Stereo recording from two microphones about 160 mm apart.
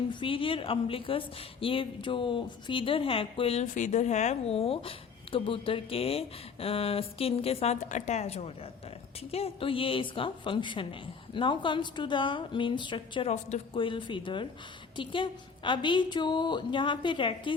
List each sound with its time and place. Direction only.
0.1 s a woman's voice: 30° left (ahead or behind)